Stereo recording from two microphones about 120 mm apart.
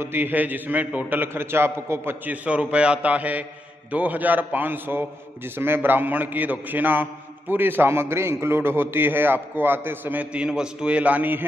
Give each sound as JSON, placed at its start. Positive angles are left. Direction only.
{"t": 0.0, "sound": "a man's voice", "side_deg": -15}